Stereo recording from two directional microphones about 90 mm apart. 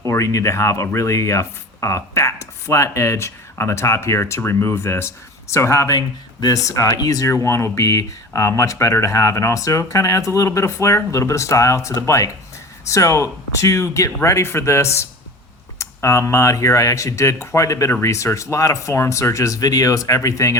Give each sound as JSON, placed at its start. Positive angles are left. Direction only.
{"t": 0.1, "sound": "speech", "side_deg": 35}